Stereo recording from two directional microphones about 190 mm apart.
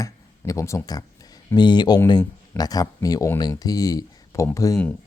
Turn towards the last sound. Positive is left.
turn(degrees=15)  # may be behind; listen again after turning